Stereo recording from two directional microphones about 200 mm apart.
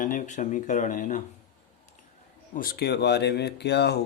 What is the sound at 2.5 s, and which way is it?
Speech, 50° left (ahead or behind).